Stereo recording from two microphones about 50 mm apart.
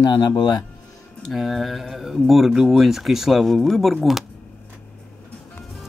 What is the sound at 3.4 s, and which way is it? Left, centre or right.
Speech, centre.